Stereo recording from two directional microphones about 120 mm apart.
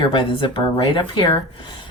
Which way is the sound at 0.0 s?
45° left (ahead or behind).